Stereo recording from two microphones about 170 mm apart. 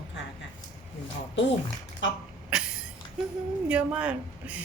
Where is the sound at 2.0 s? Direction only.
90° left.